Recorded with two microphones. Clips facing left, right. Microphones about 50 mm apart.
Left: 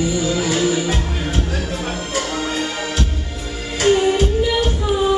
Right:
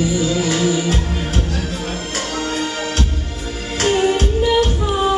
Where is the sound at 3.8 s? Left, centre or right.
Centre.